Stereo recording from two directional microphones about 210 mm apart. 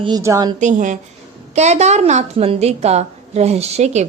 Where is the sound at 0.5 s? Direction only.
35° right (ahead or behind).